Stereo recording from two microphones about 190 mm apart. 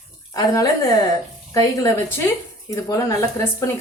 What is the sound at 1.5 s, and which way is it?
A woman's voice, 15° left (ahead or behind).